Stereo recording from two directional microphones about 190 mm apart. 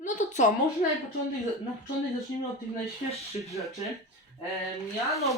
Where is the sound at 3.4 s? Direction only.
Centre (ahead or behind).